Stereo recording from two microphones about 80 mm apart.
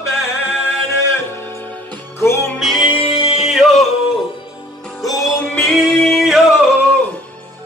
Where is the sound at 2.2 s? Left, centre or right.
Left.